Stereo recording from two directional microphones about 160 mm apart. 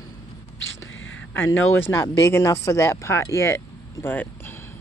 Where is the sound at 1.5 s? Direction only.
15° left (ahead or behind).